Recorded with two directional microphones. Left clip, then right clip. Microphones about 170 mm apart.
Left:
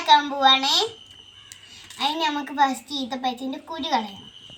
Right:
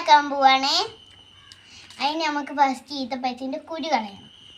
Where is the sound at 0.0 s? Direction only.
25° right (ahead or behind).